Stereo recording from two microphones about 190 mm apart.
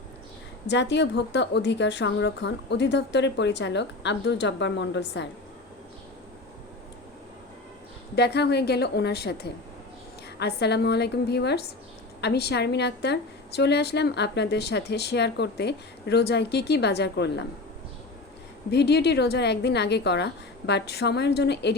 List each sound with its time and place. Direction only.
0.7 s a woman's voice: 65° left (ahead or behind)
8.1 s a woman's voice: 60° left (ahead or behind)
18.7 s a woman's voice: 60° left (ahead or behind)